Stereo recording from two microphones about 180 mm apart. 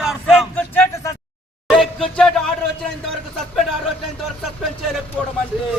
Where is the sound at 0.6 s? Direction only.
10° left (ahead or behind).